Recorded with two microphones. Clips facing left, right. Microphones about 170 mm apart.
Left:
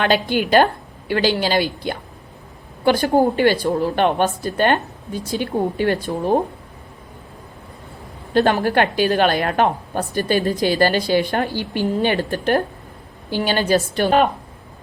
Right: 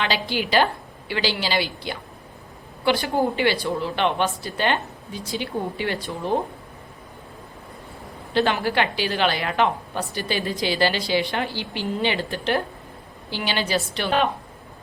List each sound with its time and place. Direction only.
0.0 s a woman's voice: 50° left (ahead or behind)
8.3 s a woman's voice: 45° left (ahead or behind)